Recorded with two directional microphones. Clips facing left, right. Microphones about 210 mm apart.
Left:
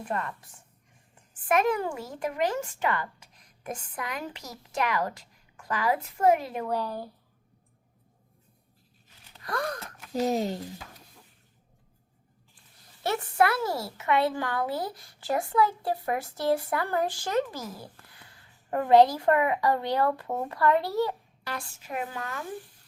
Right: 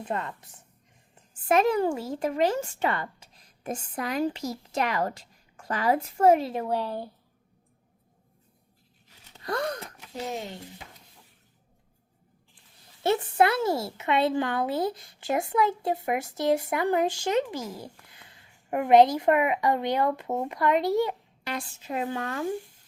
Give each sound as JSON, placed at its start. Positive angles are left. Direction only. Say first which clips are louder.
{"t": 0.0, "sound": "a woman's voice", "louder": "right 1 dB", "side_deg": -20}
{"t": 9.3, "sound": "a sound", "louder": "right 2 dB", "side_deg": -25}
{"t": 10.2, "sound": "speech", "louder": "left 7 dB", "side_deg": 40}
{"t": 13.0, "sound": "a woman's voice", "louder": "right 3 dB", "side_deg": -20}